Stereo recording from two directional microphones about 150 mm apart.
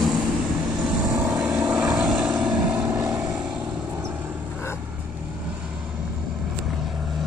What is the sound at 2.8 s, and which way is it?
Vehicle, 25° right (ahead or behind).